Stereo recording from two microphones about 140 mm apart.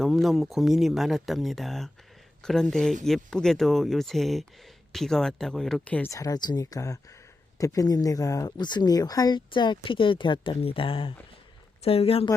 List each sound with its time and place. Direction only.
0.0 s speech: centre (ahead or behind)
6.1 s a woman's voice: 25° left (ahead or behind); by 12.3 s 45° left (ahead or behind)